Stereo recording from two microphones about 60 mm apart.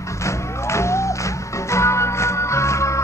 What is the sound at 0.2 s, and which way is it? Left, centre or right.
Music, left.